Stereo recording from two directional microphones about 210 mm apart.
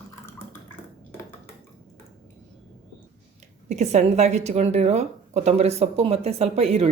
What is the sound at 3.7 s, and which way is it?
Speech, 30° right (ahead or behind).